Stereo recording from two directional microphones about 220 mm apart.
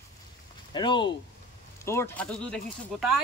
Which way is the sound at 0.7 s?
20° left (ahead or behind).